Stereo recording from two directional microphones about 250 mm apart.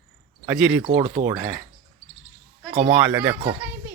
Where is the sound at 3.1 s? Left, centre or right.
Centre.